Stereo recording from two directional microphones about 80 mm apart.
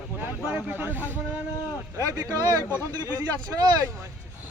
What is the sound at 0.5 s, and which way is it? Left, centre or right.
Speech, right.